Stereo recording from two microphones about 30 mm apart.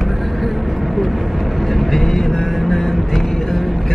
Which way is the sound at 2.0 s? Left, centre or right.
Centre.